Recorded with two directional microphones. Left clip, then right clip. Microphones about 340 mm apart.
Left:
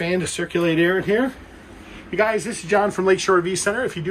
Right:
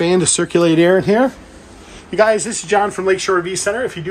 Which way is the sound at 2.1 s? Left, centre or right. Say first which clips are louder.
Right 7 dB; centre.